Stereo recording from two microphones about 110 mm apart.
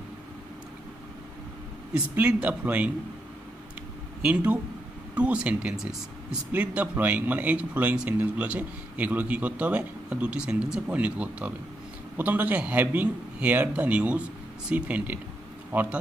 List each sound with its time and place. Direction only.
2.1 s speech: 15° right (ahead or behind)
4.2 s speech: 15° right (ahead or behind)